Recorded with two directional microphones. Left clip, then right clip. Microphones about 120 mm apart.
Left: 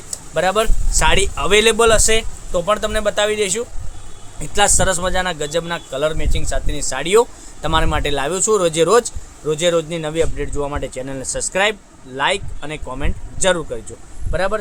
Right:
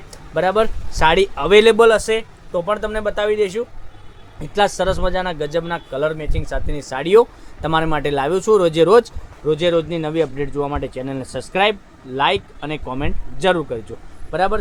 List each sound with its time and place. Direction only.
0.1 s speech: 70° right (ahead or behind); by 3.7 s 90° right
4.4 s speech: 55° right (ahead or behind); by 13.7 s 90° right